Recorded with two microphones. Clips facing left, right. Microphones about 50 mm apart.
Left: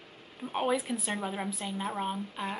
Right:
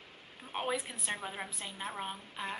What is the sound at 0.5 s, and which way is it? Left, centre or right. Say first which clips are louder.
Speech: left 6 dB; centre.